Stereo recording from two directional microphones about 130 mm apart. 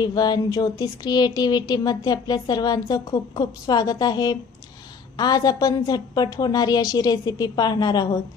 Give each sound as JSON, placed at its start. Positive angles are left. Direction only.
{"t": 0.0, "sound": "speech", "side_deg": 30}